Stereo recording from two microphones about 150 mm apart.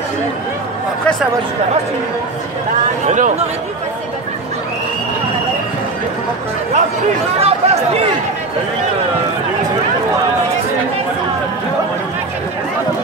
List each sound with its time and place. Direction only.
3.1 s speech: 55° right (ahead or behind)
7.3 s speech: 40° right (ahead or behind)